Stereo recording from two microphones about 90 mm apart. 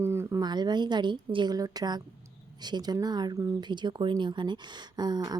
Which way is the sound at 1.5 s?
45° right (ahead or behind).